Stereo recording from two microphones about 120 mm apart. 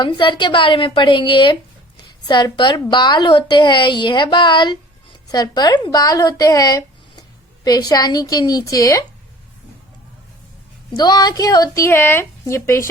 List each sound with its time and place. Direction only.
0.0 s a woman's voice: 40° left (ahead or behind)
10.9 s a woman's voice: 35° left (ahead or behind)